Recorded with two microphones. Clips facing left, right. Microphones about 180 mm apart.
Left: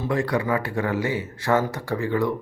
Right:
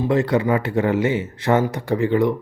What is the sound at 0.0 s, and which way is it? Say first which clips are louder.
Speech: right 5 dB; 25° right (ahead or behind).